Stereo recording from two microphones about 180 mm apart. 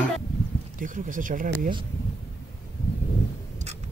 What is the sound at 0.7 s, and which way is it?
Speech, 45° right (ahead or behind).